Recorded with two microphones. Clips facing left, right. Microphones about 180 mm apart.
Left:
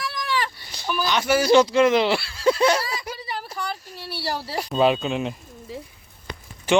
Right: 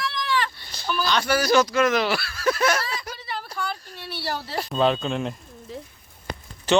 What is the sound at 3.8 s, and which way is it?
Pigeon, 5° left (ahead or behind).